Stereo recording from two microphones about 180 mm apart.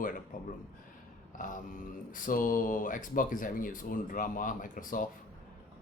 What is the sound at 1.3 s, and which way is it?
Mantra, 45° left (ahead or behind).